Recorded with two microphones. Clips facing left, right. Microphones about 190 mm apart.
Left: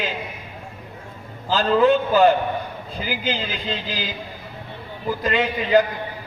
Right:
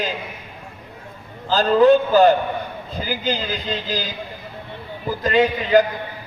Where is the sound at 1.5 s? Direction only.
40° right (ahead or behind).